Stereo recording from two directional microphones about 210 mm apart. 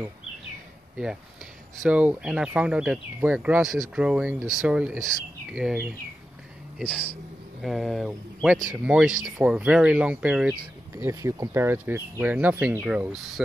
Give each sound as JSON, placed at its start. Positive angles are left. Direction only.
{"t": 1.8, "sound": "speech", "side_deg": -5}
{"t": 7.6, "sound": "speech", "side_deg": 0}